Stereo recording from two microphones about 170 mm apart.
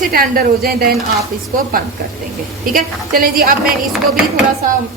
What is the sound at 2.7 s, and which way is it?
Speech, 55° right (ahead or behind).